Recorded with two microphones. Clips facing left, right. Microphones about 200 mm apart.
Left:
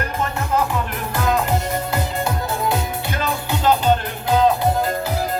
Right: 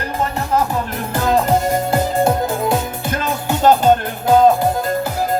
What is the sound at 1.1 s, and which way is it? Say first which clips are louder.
Music: right 5 dB; 45° right (ahead or behind).